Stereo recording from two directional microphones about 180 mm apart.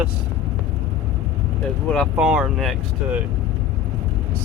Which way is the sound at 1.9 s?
Centre (ahead or behind).